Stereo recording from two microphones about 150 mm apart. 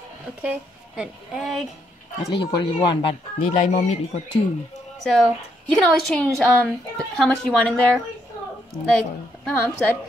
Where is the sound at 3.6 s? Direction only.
55° left (ahead or behind).